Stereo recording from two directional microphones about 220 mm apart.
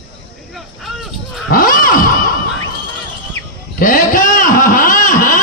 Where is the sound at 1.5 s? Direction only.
40° left (ahead or behind).